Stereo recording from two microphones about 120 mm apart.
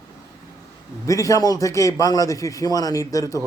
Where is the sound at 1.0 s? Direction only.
25° left (ahead or behind).